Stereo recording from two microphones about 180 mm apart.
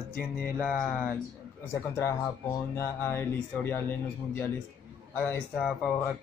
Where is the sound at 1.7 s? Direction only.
15° left (ahead or behind).